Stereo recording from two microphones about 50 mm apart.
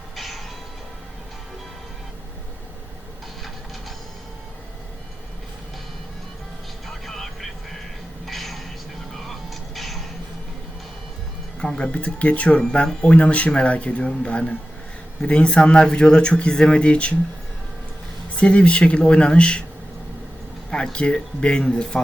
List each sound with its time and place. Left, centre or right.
0.2 s music: centre
6.8 s vehicle: centre
8.3 s a sound: centre
9.2 s music: centre
11.8 s speech: left
18.3 s speech: left
20.7 s speech: centre